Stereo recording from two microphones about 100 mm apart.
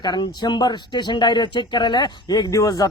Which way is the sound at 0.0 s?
45° left (ahead or behind).